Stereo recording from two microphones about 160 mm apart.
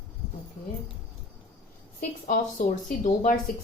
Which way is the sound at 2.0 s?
60° left (ahead or behind).